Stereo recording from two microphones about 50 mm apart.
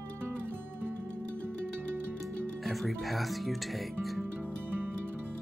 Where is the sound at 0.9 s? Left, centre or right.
Left.